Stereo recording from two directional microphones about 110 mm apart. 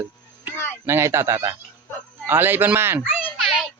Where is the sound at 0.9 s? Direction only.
25° right (ahead or behind).